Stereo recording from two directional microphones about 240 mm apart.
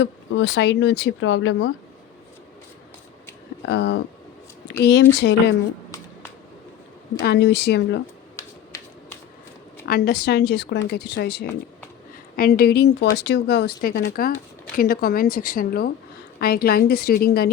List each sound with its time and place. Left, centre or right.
0.0 s speech: left
3.7 s speech: left
7.2 s speech: left
8.7 s shuffling cards: centre
9.8 s speech: left